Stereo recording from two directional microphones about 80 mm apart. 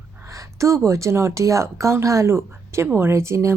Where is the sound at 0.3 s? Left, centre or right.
Right.